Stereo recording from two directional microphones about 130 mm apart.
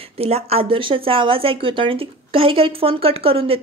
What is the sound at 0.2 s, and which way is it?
Speech, 50° right (ahead or behind).